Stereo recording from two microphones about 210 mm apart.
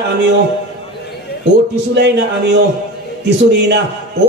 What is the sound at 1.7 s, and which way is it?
Speech, 55° right (ahead or behind).